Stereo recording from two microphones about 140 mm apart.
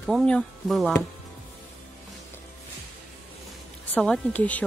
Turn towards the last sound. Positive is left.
turn(degrees=10)  # may be behind; listen again after turning